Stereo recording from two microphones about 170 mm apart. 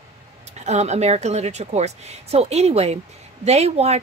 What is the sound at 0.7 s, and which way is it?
A woman's voice, 40° right (ahead or behind).